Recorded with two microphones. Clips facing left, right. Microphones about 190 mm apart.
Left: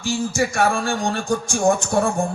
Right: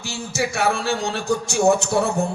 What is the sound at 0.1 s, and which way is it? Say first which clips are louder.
A man's voice: left 4 dB; 65° right (ahead or behind).